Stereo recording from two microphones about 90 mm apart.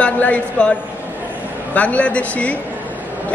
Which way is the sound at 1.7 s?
15° left (ahead or behind).